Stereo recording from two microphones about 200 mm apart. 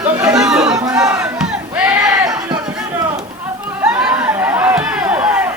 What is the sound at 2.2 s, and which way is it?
Music, 20° right (ahead or behind).